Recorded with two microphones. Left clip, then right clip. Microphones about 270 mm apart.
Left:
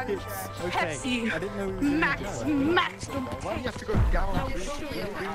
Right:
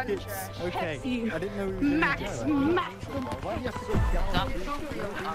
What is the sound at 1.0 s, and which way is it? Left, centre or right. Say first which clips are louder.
Speech: left 3 dB; left.